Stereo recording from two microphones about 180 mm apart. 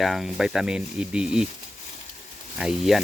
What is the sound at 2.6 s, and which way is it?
Speech, centre (ahead or behind).